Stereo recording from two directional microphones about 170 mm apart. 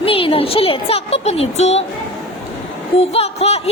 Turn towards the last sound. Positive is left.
turn(degrees=35)  # may be behind; listen again after turning